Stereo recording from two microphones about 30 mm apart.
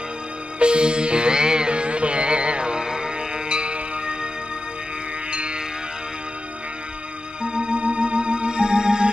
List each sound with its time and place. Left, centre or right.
0.6 s music: right
1.7 s music: right
5.3 s music: right
7.5 s music: right